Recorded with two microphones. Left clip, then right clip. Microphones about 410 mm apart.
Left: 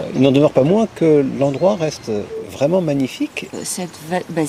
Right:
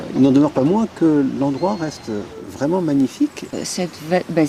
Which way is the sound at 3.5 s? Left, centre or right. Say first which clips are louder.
Right 2 dB; centre.